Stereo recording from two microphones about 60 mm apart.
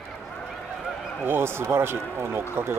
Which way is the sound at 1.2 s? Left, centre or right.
Right.